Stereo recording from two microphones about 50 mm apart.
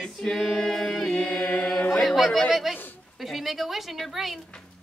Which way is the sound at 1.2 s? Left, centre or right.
Left.